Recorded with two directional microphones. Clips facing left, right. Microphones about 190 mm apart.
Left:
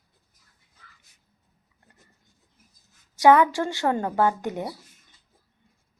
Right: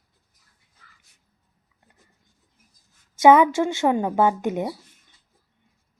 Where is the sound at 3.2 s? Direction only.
20° right (ahead or behind).